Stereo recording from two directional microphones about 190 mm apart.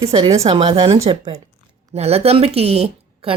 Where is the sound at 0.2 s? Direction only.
30° right (ahead or behind).